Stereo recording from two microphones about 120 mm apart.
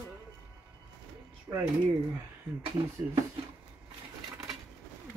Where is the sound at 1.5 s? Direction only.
25° right (ahead or behind).